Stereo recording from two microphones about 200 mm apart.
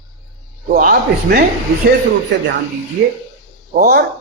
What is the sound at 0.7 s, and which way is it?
Speech, 45° right (ahead or behind).